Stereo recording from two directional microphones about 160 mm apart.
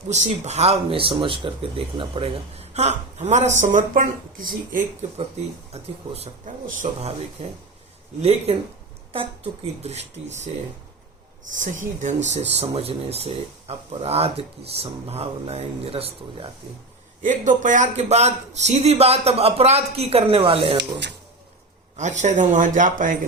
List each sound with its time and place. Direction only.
0.1 s speech: 45° right (ahead or behind)
5.4 s speech: 45° right (ahead or behind)
8.2 s speech: 40° right (ahead or behind)
11.5 s speech: 50° right (ahead or behind)
17.2 s speech: 50° right (ahead or behind); by 21.0 s 35° right (ahead or behind)
21.9 s speech: 45° right (ahead or behind)